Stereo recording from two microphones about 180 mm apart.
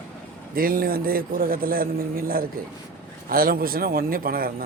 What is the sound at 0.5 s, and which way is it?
A man's voice, 55° right (ahead or behind).